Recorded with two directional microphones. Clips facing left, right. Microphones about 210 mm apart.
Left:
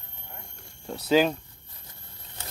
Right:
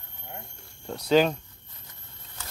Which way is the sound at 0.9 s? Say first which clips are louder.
Right 1 dB; 5° left (ahead or behind).